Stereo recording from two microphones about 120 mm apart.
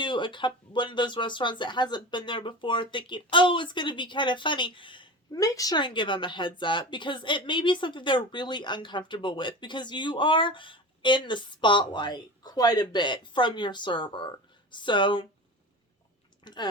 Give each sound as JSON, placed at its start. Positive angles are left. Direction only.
{"t": 0.0, "sound": "speech", "side_deg": 40}
{"t": 5.4, "sound": "speech", "side_deg": 30}
{"t": 16.4, "sound": "speech", "side_deg": 35}